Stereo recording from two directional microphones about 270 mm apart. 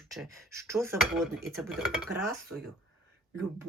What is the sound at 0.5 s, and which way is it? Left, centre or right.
Speech, centre.